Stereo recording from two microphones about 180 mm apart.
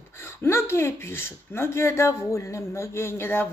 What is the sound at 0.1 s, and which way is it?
Speech, 15° left (ahead or behind).